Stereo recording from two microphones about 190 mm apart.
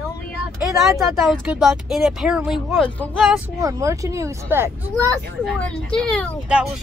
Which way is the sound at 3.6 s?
15° right (ahead or behind).